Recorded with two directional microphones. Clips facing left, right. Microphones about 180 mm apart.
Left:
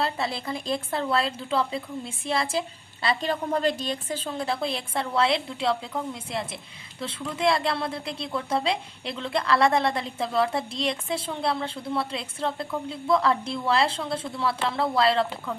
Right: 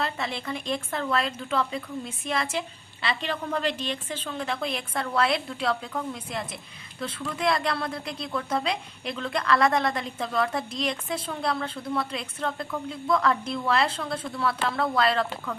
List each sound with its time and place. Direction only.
0.0 s a woman's voice: 30° left (ahead or behind)